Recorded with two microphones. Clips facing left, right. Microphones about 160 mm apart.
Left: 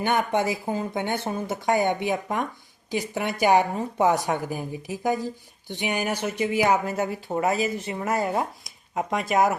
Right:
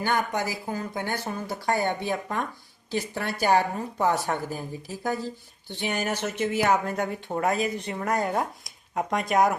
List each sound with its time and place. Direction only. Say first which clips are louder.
0.0 s a woman's voice: left 3 dB; 25° left (ahead or behind); by 9.6 s centre (ahead or behind)